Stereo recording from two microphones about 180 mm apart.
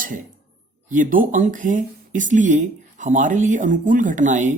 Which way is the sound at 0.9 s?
45° right (ahead or behind).